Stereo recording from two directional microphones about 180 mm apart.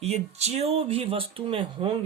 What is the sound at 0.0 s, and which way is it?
Speech, 35° right (ahead or behind).